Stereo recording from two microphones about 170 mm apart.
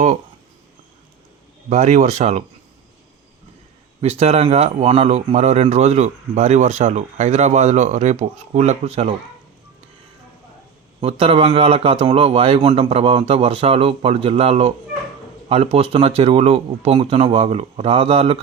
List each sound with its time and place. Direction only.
1.7 s speech: 45° right (ahead or behind)
4.0 s a man's voice: 40° right (ahead or behind)
11.0 s a man's voice: 35° right (ahead or behind)